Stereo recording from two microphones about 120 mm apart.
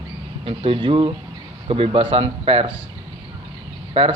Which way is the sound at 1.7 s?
55° right (ahead or behind).